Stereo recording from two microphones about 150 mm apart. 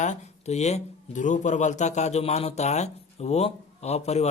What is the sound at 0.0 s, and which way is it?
Speech, 50° left (ahead or behind).